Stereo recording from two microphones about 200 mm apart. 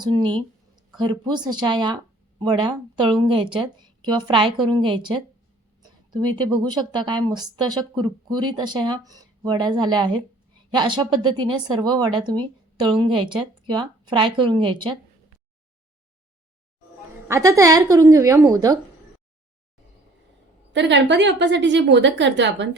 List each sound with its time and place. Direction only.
0.0 s speech: 20° right (ahead or behind)
17.2 s speech: 15° right (ahead or behind)
20.7 s a woman's voice: 60° right (ahead or behind)